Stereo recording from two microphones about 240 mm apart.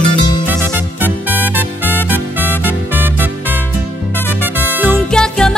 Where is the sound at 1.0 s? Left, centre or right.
Centre.